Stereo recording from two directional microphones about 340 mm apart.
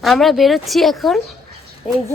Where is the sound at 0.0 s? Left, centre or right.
Centre.